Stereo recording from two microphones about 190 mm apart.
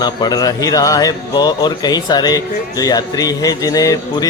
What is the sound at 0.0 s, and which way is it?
Speech, 20° left (ahead or behind).